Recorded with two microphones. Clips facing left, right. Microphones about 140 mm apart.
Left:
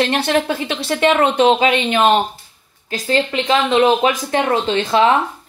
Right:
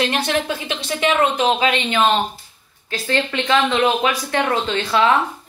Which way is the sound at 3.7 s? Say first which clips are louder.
Left 4 dB; 30° left (ahead or behind).